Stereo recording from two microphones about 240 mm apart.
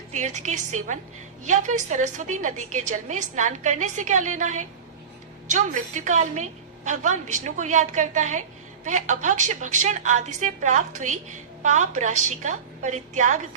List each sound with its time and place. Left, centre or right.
0.1 s a woman's voice: right